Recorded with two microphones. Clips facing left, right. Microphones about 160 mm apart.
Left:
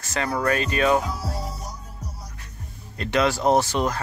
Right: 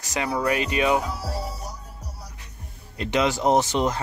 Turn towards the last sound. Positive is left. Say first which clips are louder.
# even
turn(degrees=-20)  # may be behind; listen again after turning